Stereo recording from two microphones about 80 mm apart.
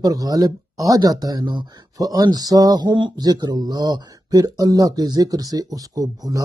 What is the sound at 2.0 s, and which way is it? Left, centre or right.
Speech, right.